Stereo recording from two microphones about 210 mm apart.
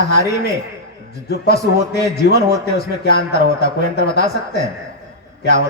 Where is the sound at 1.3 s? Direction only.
50° left (ahead or behind).